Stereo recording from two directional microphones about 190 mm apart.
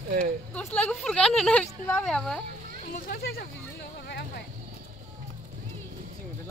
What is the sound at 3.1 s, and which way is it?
Speech, 55° left (ahead or behind).